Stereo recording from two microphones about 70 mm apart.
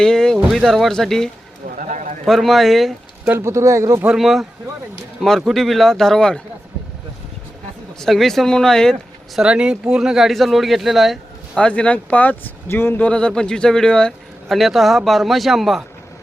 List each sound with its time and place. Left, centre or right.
0.0 s a sound: centre
0.5 s speech: centre
3.4 s speech: right
4.1 s speech: centre
7.9 s speech: centre
9.4 s speech: centre
11.5 s speech: centre
12.6 s speech: left
13.1 s a man's voice: centre
14.5 s speech: centre